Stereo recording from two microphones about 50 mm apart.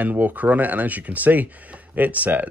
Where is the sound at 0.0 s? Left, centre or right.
Right.